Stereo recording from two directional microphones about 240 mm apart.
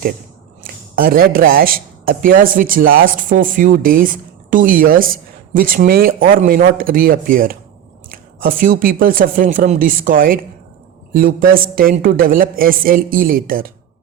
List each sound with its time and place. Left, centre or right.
0.6 s speech: right